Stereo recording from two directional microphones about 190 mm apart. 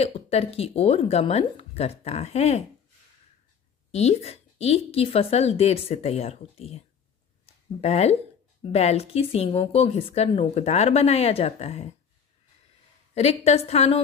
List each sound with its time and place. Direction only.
0.0 s a woman's voice: 30° left (ahead or behind)
3.9 s a woman's voice: 35° left (ahead or behind)
13.1 s a woman's voice: 35° left (ahead or behind)